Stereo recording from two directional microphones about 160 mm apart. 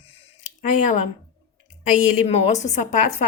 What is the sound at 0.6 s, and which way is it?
A woman's voice, 50° left (ahead or behind).